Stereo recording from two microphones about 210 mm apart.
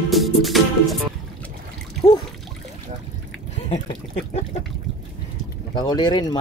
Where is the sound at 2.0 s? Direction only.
15° left (ahead or behind).